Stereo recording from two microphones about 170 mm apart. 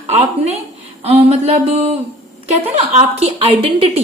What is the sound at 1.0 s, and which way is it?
Speech, 35° right (ahead or behind).